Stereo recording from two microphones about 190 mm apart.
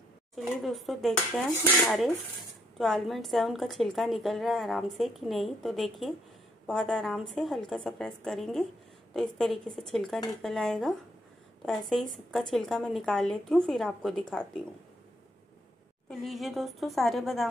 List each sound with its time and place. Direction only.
0.4 s a woman's voice: centre (ahead or behind)
16.1 s a woman's voice: centre (ahead or behind)